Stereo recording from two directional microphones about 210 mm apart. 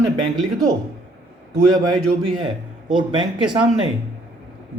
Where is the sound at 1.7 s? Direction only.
20° right (ahead or behind).